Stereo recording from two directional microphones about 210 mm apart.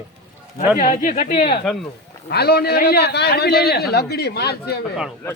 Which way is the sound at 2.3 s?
50° left (ahead or behind).